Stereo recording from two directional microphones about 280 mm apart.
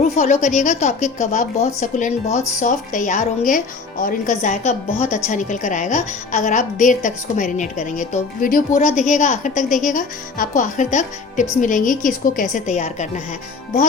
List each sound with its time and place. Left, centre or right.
0.0 s a woman's voice: left